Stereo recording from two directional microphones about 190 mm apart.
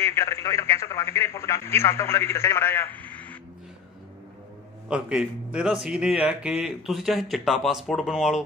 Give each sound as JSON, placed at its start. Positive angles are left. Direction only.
{"t": 0.0, "sound": "speech", "side_deg": 15}
{"t": 4.8, "sound": "speech", "side_deg": -5}